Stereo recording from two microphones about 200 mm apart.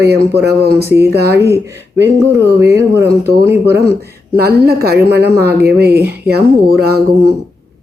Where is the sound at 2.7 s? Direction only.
15° right (ahead or behind).